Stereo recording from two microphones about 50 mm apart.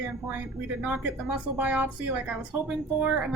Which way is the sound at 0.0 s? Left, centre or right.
Right.